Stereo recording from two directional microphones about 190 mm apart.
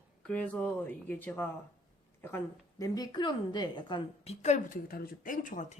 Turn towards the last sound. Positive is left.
turn(degrees=45)  # may be behind; listen again after turning